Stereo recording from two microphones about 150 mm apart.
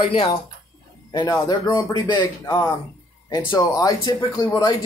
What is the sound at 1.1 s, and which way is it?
A man's voice, 30° left (ahead or behind).